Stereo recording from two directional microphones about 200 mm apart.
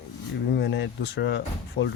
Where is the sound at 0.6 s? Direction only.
65° left (ahead or behind).